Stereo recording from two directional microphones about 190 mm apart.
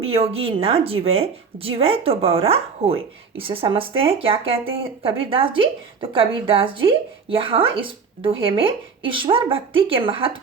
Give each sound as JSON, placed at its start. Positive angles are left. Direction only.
{"t": 0.0, "sound": "speech", "side_deg": -30}